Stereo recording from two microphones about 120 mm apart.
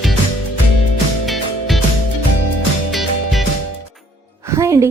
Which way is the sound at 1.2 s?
Centre (ahead or behind).